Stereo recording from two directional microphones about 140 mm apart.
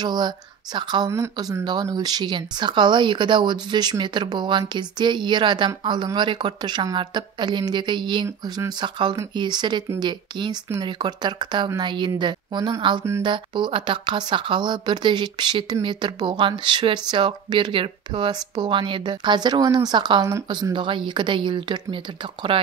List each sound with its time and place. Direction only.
0.0 s speech: 30° right (ahead or behind)
1.1 s speech: 20° right (ahead or behind)
1.6 s speech: 30° right (ahead or behind)